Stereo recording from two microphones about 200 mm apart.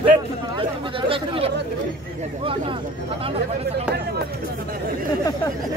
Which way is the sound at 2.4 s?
25° right (ahead or behind).